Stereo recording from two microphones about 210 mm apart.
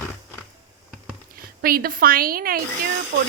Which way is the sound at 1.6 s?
45° right (ahead or behind).